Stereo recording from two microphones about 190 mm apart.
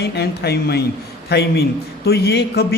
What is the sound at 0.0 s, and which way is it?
A man's voice, 60° left (ahead or behind).